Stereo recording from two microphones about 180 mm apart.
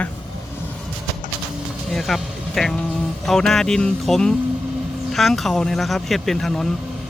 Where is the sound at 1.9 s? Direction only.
Centre (ahead or behind).